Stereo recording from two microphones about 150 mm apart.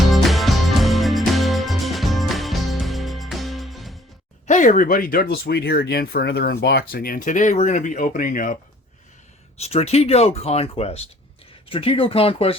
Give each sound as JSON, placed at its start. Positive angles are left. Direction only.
{"t": 0.0, "sound": "music", "side_deg": 0}
{"t": 4.4, "sound": "speech", "side_deg": 55}
{"t": 9.6, "sound": "speech", "side_deg": 45}